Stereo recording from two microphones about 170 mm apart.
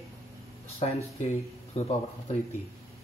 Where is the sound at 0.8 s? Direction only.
35° left (ahead or behind).